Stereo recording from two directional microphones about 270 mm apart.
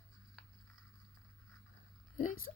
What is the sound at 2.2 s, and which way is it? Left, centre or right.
Speech, left.